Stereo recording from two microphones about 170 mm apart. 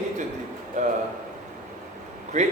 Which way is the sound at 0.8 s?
45° right (ahead or behind).